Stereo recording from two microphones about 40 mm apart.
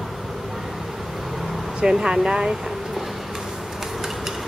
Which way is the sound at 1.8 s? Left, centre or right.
Centre.